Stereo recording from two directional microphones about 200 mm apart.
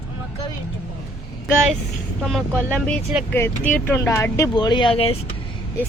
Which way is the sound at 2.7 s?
5° left (ahead or behind).